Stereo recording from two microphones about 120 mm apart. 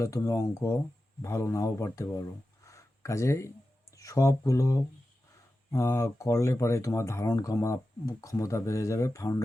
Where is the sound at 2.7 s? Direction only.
25° left (ahead or behind).